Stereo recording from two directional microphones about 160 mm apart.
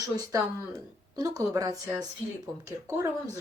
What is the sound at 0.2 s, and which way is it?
Speech, 20° right (ahead or behind).